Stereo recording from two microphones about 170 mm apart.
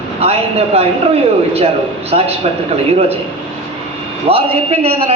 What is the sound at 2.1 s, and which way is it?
Speech, 35° right (ahead or behind).